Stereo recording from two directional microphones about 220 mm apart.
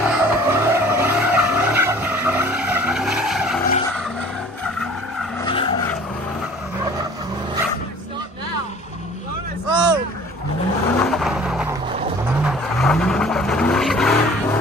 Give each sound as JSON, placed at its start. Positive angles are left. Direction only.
{"t": 0.1, "sound": "vehicle", "side_deg": -10}
{"t": 5.4, "sound": "vehicle", "side_deg": 25}
{"t": 9.7, "sound": "a sound", "side_deg": -20}
{"t": 11.0, "sound": "vehicle", "side_deg": 0}